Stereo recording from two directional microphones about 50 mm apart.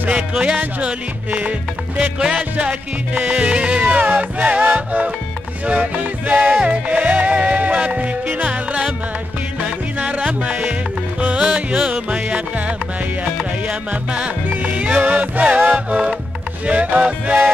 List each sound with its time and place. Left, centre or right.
0.1 s music: centre